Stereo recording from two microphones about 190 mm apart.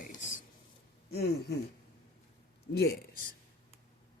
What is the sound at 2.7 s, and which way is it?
Speech, 60° left (ahead or behind).